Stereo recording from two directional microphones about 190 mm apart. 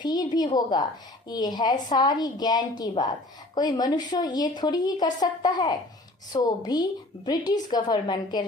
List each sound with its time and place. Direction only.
0.0 s a woman's voice: 20° left (ahead or behind)